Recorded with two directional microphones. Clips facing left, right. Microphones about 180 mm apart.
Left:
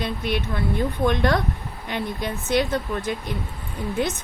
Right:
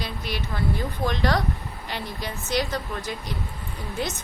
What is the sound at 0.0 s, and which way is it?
Speech, 55° left (ahead or behind).